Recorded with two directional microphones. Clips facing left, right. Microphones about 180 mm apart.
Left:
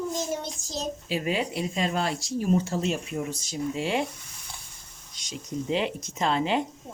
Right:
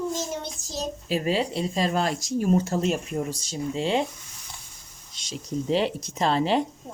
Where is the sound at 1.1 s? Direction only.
35° right (ahead or behind).